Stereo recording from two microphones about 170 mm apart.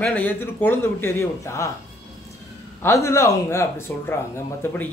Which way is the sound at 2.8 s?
15° left (ahead or behind).